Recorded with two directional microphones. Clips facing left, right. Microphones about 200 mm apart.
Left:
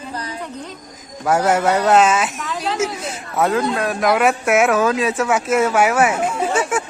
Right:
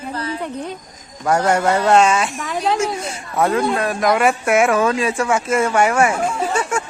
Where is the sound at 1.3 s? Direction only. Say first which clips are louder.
Even; 5° left (ahead or behind).